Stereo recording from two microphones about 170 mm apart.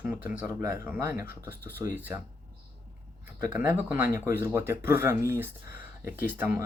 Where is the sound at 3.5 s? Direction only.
15° right (ahead or behind).